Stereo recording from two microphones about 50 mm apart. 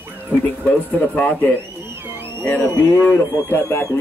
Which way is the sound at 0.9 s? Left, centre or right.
Left.